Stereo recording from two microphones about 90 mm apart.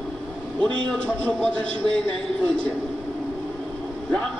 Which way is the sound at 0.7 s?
10° left (ahead or behind).